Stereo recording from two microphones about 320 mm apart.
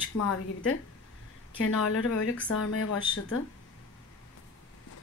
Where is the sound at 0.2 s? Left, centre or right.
Left.